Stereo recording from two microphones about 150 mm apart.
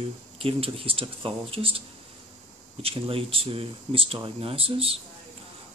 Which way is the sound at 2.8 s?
40° right (ahead or behind).